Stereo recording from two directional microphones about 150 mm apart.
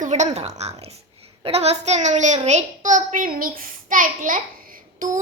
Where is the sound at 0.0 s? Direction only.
50° right (ahead or behind).